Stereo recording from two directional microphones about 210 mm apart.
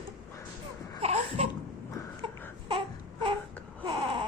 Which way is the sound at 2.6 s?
20° right (ahead or behind).